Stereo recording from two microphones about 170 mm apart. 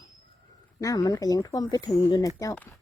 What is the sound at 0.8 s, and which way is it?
Speech, 20° left (ahead or behind).